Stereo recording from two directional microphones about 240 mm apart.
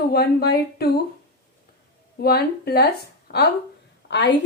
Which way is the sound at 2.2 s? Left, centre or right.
Left.